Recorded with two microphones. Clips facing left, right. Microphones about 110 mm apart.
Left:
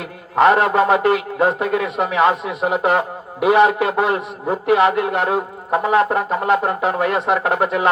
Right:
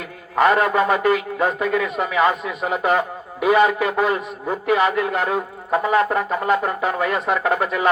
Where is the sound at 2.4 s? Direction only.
70° left (ahead or behind).